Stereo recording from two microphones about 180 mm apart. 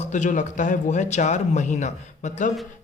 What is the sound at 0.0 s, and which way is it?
Speech, 40° left (ahead or behind).